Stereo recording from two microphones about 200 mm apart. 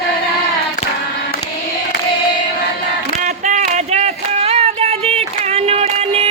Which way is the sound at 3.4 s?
35° right (ahead or behind).